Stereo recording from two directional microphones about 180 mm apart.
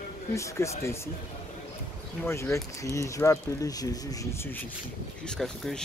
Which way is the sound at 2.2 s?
15° left (ahead or behind).